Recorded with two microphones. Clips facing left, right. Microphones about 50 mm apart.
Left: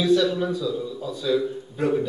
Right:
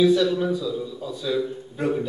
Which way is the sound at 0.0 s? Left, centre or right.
Centre.